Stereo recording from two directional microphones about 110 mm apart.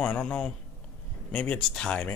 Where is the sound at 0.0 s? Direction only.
10° left (ahead or behind).